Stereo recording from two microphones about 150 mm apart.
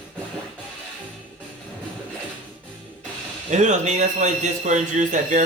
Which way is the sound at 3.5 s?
50° right (ahead or behind).